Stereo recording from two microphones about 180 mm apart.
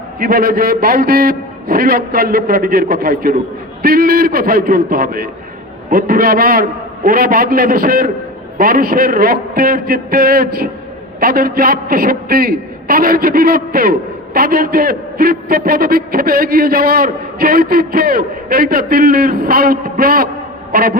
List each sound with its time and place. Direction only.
0.2 s a man's voice: 55° right (ahead or behind)